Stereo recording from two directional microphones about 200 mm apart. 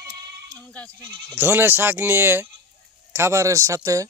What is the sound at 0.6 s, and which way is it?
Speech, 5° left (ahead or behind).